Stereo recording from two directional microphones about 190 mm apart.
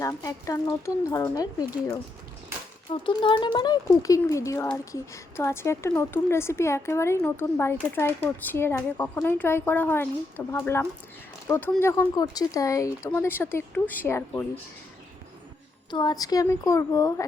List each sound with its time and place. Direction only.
0.0 s speech: 15° left (ahead or behind)
15.9 s speech: 20° left (ahead or behind)